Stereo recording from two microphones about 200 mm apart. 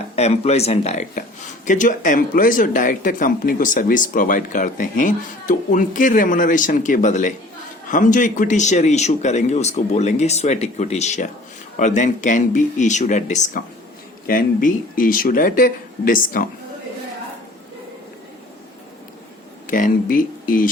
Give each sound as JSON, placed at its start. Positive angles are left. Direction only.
{"t": 0.2, "sound": "speech", "side_deg": 30}
{"t": 19.6, "sound": "speech", "side_deg": 45}